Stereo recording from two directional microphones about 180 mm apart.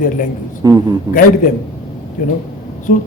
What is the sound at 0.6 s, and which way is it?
Speech, 20° right (ahead or behind).